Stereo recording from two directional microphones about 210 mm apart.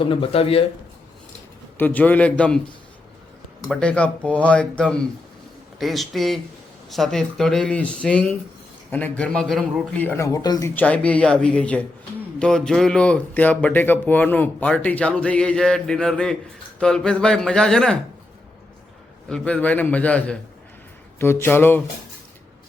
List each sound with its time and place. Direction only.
0.0 s speech: 25° left (ahead or behind)
1.8 s a man's voice: 10° left (ahead or behind)
3.7 s a man's voice: 5° left (ahead or behind)
19.3 s a man's voice: 5° left (ahead or behind)